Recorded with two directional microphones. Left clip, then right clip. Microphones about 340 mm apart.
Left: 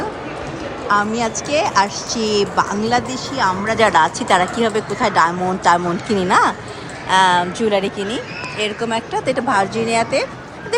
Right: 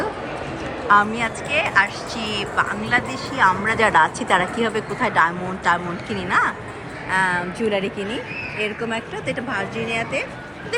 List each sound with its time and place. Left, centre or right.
0.9 s a woman's voice: centre
7.7 s speech: left
8.6 s a woman's voice: centre